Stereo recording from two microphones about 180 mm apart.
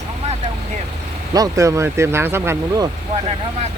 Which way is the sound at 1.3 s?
20° right (ahead or behind).